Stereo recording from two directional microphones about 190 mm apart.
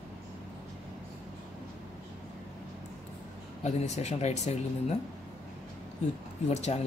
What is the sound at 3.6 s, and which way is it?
Speech, 35° left (ahead or behind).